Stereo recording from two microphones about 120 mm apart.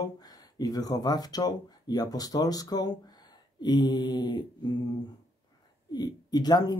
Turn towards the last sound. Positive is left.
turn(degrees=35)  # may be behind; listen again after turning